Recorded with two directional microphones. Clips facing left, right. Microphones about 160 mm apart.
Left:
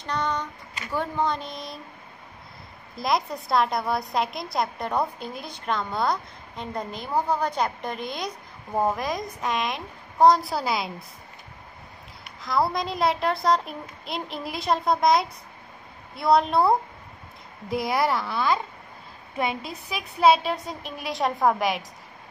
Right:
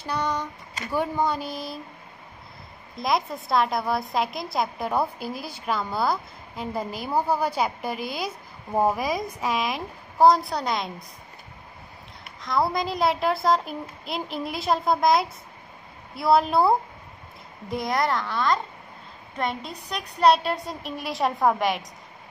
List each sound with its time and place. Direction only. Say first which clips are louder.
0.0 s a sound: even; 10° right (ahead or behind)
0.9 s speech: right 1 dB; 10° right (ahead or behind)
3.0 s a woman's voice: even; centre (ahead or behind)
12.4 s a woman's voice: even; centre (ahead or behind)